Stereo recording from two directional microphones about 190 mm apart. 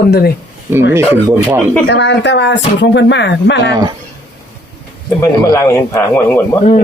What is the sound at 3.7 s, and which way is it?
Mantra, 20° right (ahead or behind).